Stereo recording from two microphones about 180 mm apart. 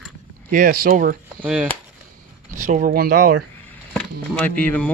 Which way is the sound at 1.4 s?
5° right (ahead or behind).